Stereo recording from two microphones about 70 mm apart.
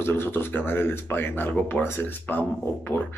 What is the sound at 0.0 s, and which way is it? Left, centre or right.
Speech, left.